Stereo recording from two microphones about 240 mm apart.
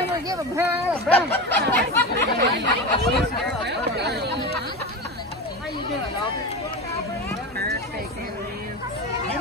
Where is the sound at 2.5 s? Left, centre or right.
Right.